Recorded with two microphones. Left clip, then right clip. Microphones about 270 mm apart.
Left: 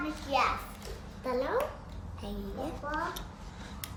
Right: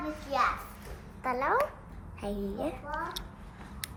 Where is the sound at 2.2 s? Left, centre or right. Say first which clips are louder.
Right 5 dB; right.